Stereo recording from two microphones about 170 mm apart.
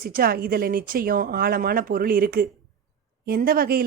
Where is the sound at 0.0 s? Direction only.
60° right (ahead or behind).